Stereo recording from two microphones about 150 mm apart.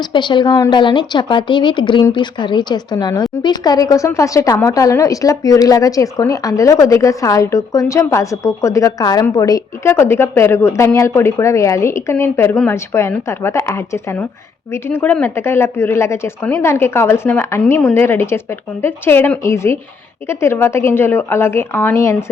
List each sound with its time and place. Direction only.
0.0 s a woman's voice: 30° left (ahead or behind)